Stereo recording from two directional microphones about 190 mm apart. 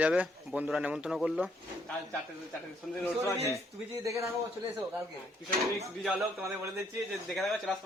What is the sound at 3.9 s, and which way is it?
Speech, 15° right (ahead or behind).